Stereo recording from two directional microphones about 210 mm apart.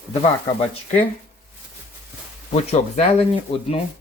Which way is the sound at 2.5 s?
35° left (ahead or behind).